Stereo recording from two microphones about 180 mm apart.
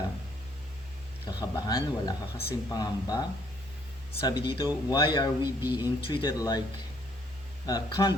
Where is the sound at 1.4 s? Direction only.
20° left (ahead or behind).